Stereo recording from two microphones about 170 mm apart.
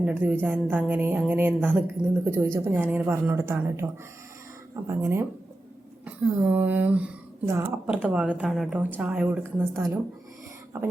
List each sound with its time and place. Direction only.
0.0 s speech: 10° right (ahead or behind)